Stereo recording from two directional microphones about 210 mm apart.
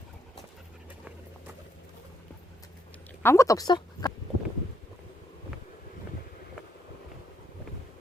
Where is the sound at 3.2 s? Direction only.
15° left (ahead or behind).